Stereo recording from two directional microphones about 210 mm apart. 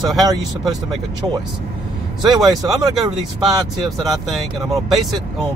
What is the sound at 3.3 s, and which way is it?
Speech, centre (ahead or behind).